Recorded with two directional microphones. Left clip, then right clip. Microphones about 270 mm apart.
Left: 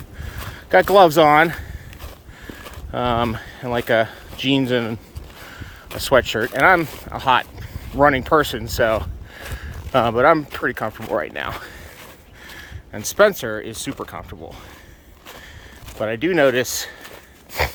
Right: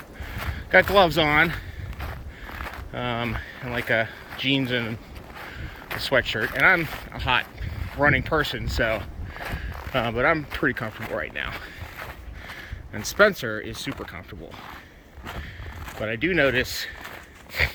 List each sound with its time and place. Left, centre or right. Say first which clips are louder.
0.5 s speech: left 4 dB; left
2.9 s speech: left 9 dB; left
6.1 s speech: left 6 dB; left
8.8 s zipper: left 7 dB; left
9.6 s speech: left 9 dB; left
12.9 s speech: left 4 dB; centre
16.0 s speech: left 5 dB; centre